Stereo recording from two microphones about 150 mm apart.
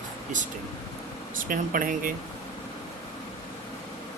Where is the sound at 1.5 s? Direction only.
65° right (ahead or behind).